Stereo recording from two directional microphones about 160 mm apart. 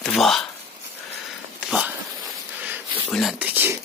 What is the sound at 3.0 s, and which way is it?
Speech, 5° left (ahead or behind).